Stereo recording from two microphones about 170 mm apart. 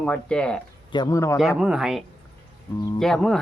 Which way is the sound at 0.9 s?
20° left (ahead or behind).